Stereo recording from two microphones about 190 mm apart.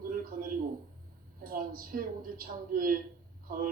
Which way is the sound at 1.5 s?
50° right (ahead or behind).